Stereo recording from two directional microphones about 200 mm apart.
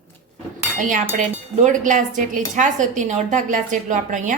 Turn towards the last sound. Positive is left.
turn(degrees=-40)  # may be behind; listen again after turning